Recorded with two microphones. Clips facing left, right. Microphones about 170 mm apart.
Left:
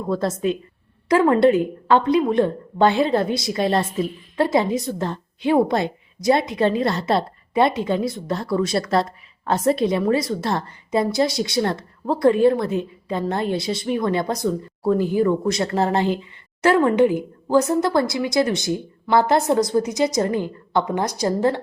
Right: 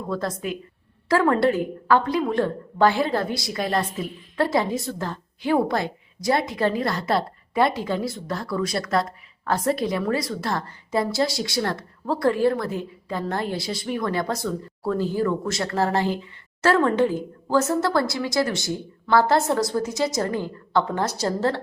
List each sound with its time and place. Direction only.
0.1 s a woman's voice: 25° left (ahead or behind)